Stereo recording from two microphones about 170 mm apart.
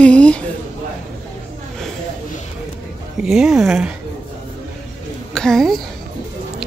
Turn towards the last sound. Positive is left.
turn(degrees=0)  # may be behind; listen again after turning